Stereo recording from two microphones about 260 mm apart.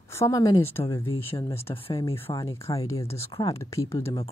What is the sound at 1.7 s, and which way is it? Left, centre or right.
Speech, left.